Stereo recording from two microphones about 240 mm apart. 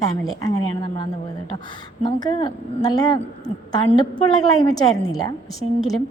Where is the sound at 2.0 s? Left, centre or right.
Centre.